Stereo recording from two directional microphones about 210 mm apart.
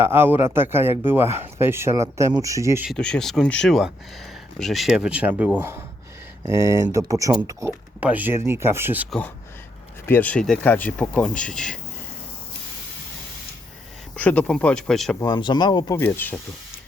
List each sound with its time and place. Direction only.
0.0 s speech: 10° right (ahead or behind)
2.9 s speech: 5° left (ahead or behind)
9.0 s speech: 5° left (ahead or behind)
14.2 s speech: 5° left (ahead or behind)
15.2 s speech: 20° left (ahead or behind)